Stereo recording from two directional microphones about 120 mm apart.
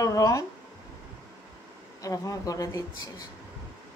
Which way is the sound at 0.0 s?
30° left (ahead or behind).